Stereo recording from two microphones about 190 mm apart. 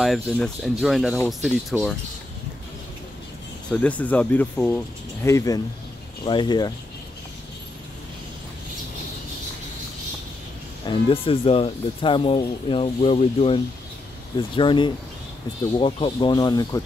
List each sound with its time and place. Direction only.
0.0 s speech: centre (ahead or behind)
3.7 s speech: 5° left (ahead or behind)
10.9 s speech: 30° left (ahead or behind)